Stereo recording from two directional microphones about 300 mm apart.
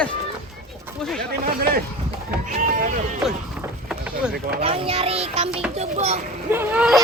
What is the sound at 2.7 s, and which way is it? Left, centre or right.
Music, right.